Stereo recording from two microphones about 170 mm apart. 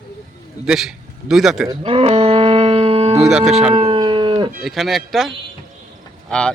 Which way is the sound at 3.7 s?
30° right (ahead or behind).